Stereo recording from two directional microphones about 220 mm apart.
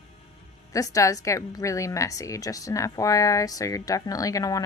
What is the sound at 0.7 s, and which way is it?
A woman's voice, 15° left (ahead or behind).